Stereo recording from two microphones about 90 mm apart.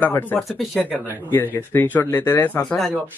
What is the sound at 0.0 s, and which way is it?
Speech, 20° left (ahead or behind).